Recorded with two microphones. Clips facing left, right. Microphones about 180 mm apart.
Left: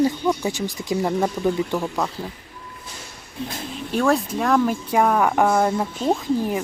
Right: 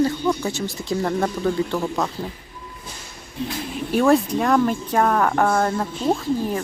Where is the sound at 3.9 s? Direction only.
Centre (ahead or behind).